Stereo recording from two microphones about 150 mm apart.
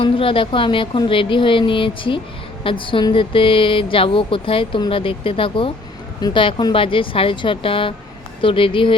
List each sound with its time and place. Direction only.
0.0 s speech: 35° left (ahead or behind)